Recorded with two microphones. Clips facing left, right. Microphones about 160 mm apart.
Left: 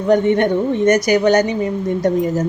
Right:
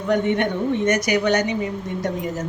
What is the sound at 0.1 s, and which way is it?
A woman's voice, 35° left (ahead or behind).